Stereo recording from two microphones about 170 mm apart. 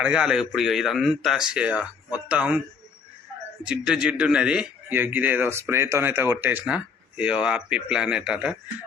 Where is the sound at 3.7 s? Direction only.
5° right (ahead or behind).